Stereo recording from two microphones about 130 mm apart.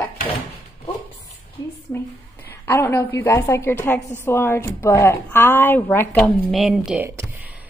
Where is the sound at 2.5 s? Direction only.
20° left (ahead or behind).